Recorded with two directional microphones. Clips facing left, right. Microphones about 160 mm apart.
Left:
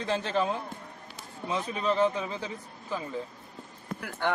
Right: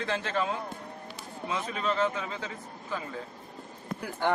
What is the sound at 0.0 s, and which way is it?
Speech, 15° left (ahead or behind).